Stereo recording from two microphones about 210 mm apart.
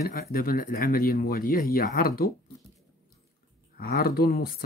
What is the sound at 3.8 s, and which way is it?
Speech, 45° left (ahead or behind).